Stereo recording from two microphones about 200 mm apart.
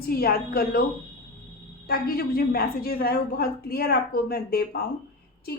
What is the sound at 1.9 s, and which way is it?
Speech, 50° left (ahead or behind).